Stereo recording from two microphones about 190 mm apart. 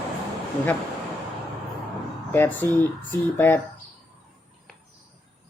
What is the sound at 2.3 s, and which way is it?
Speech, 10° left (ahead or behind).